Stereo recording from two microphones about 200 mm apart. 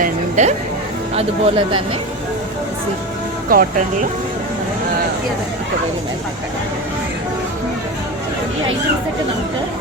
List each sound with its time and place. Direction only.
0.0 s music: 35° right (ahead or behind)
1.1 s speech: 30° right (ahead or behind)
3.5 s speech: 45° right (ahead or behind)